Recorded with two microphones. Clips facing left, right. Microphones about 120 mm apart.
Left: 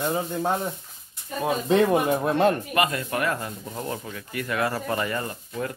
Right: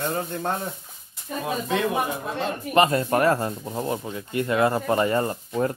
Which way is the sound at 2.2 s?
55° left (ahead or behind).